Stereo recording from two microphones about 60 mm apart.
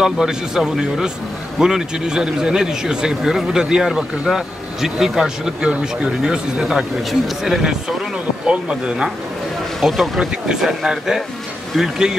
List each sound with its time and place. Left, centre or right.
0.0 s speech: centre
8.5 s speech: centre
9.8 s speech: centre